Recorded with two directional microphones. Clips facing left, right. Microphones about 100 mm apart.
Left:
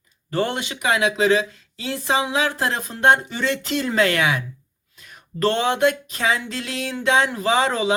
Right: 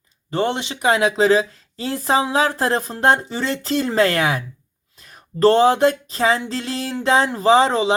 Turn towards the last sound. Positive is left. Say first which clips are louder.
# right 5 dB
turn(degrees=-30)  # may be behind; listen again after turning